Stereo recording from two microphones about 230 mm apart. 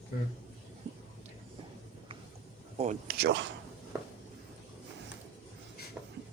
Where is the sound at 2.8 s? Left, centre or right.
Right.